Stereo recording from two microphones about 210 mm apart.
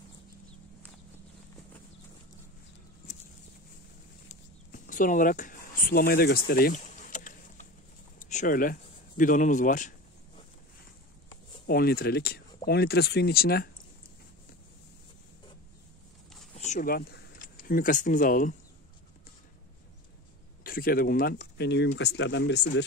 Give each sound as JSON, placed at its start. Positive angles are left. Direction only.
{"t": 4.3, "sound": "a sound", "side_deg": 35}
{"t": 8.2, "sound": "speech", "side_deg": 35}
{"t": 11.6, "sound": "speech", "side_deg": 45}
{"t": 16.5, "sound": "speech", "side_deg": 35}
{"t": 20.6, "sound": "speech", "side_deg": 45}